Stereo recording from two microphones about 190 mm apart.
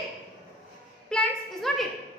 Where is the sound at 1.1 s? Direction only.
5° left (ahead or behind).